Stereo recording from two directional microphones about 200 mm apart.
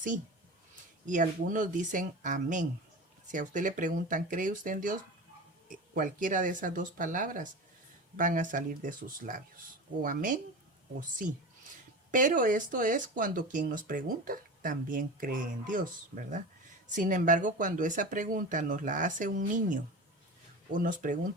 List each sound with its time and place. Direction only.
1.0 s speech: 40° right (ahead or behind)
12.1 s speech: 40° right (ahead or behind)
16.9 s speech: 40° right (ahead or behind)